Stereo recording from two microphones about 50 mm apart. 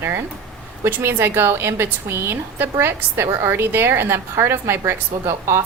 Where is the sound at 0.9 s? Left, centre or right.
Right.